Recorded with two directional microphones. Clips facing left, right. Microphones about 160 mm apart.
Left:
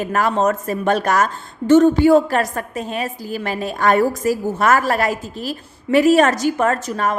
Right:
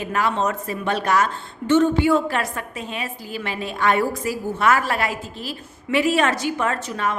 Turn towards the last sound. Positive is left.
turn(degrees=45)  # may be behind; listen again after turning